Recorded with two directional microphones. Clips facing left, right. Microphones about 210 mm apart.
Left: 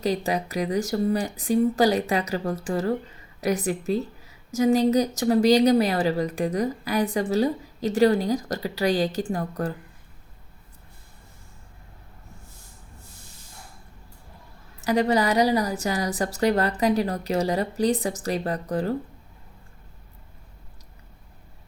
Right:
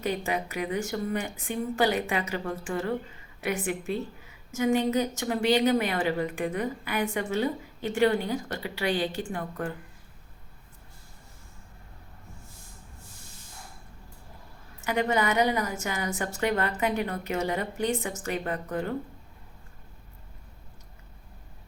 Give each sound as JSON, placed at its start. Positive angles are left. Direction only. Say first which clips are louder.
{"t": 0.0, "sound": "a woman's voice", "louder": "left 4 dB", "side_deg": 35}
{"t": 14.8, "sound": "a woman's voice", "louder": "left 5 dB", "side_deg": 35}